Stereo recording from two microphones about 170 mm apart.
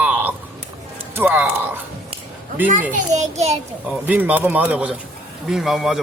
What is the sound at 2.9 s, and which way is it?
Speech, 40° right (ahead or behind).